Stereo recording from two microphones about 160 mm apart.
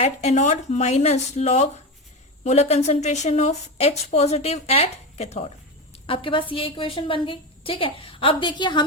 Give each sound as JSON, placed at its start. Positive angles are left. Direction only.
{"t": 0.0, "sound": "a woman's voice", "side_deg": 45}